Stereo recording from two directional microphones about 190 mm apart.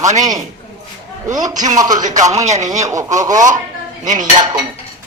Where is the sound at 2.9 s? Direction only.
15° right (ahead or behind).